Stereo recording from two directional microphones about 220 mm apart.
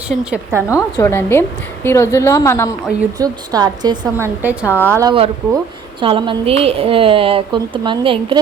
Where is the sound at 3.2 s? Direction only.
15° right (ahead or behind).